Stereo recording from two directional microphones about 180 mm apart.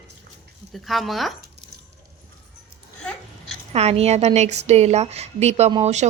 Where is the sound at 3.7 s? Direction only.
35° right (ahead or behind).